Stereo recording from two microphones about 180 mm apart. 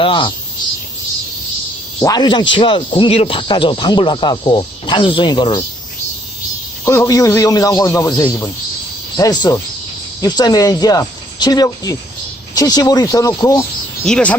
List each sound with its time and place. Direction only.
0.0 s speech: 25° left (ahead or behind)
2.0 s speech: 20° left (ahead or behind)
6.8 s a man's voice: 15° left (ahead or behind)
14.0 s speech: 5° left (ahead or behind)